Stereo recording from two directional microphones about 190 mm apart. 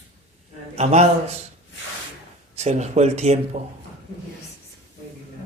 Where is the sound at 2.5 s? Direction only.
35° right (ahead or behind).